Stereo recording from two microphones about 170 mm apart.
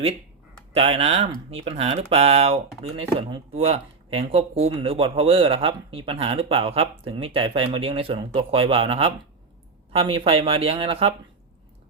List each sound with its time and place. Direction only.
0.7 s speech: 35° right (ahead or behind)